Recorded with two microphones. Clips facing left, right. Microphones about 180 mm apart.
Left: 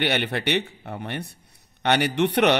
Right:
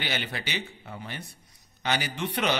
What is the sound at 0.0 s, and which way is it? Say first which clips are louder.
A man's voice: left 9 dB; 65° left (ahead or behind).